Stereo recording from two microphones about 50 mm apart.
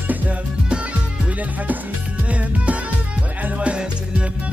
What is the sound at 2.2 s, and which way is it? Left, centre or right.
Music, right.